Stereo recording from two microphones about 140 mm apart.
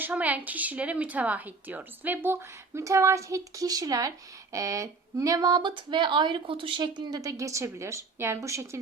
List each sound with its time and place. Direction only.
0.0 s speech: 10° right (ahead or behind)